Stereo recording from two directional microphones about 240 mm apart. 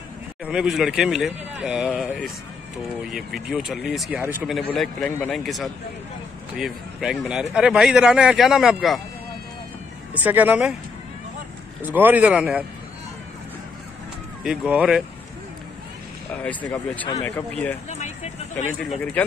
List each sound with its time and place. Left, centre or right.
0.5 s speech: centre
10.1 s speech: centre
11.9 s speech: centre
14.4 s speech: centre
16.4 s speech: centre
17.8 s vehicle: left
18.8 s speech: centre